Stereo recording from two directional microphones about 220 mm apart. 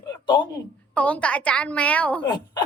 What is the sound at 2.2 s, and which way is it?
Speech, 20° left (ahead or behind).